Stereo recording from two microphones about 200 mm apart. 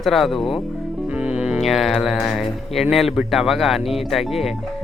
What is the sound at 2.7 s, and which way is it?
Speech, centre (ahead or behind).